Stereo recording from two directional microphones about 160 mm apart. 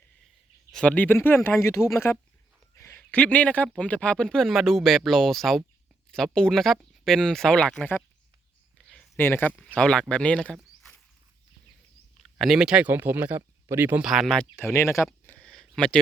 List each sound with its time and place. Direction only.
0.7 s a man's voice: 5° left (ahead or behind)
8.9 s a sound: 10° left (ahead or behind)
9.7 s speech: 5° left (ahead or behind)
12.4 s speech: 5° right (ahead or behind)
14.6 s speech: 15° left (ahead or behind)
15.2 s a sound: 10° left (ahead or behind)